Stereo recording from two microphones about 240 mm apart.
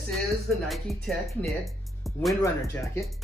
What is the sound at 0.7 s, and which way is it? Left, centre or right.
Speech, centre.